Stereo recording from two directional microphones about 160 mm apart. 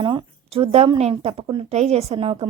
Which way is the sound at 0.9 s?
40° right (ahead or behind).